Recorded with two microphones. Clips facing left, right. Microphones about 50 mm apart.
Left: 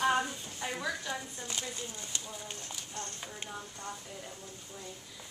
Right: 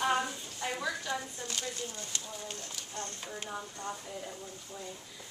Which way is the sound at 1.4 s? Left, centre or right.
Centre.